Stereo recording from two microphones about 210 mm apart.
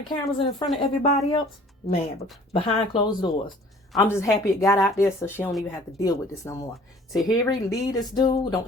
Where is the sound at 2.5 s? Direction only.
25° left (ahead or behind).